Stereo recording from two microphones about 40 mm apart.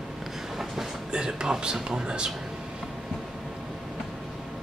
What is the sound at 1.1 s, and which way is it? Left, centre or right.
Speech, centre.